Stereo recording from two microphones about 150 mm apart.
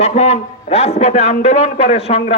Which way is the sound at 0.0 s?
45° left (ahead or behind).